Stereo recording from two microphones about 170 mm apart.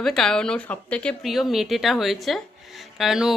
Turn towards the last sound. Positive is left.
turn(degrees=0)  # may be behind; listen again after turning